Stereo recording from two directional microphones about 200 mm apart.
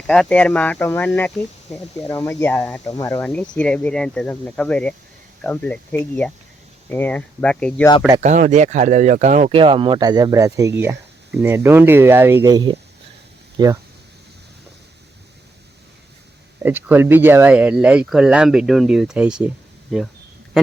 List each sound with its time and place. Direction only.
0.1 s speech: 5° left (ahead or behind)
2.8 s speech: 15° left (ahead or behind)
8.2 s speech: 35° right (ahead or behind); by 13.7 s 20° right (ahead or behind)
16.6 s speech: 10° right (ahead or behind)